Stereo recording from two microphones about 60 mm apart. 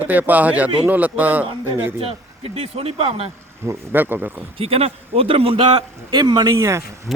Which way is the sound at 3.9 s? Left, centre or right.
Right.